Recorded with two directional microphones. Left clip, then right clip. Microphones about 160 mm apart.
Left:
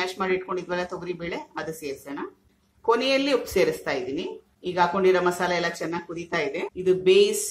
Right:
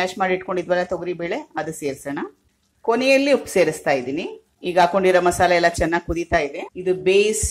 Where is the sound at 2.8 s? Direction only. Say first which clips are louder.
Right 5 dB; 30° right (ahead or behind).